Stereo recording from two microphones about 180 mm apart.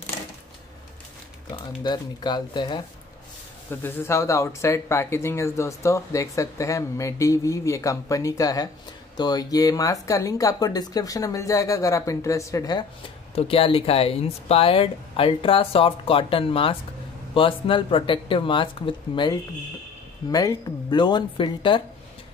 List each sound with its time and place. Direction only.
1.8 s speech: 25° left (ahead or behind)
3.8 s speech: 15° left (ahead or behind)
13.3 s speech: 35° left (ahead or behind)